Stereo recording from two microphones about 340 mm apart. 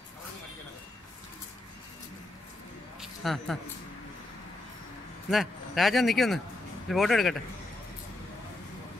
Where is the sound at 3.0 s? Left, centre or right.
Centre.